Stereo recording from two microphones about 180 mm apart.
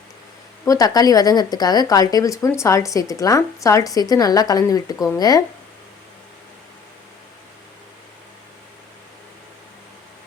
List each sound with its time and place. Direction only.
0.6 s speech: 20° left (ahead or behind)